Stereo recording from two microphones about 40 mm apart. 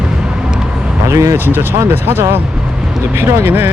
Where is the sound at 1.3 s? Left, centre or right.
Right.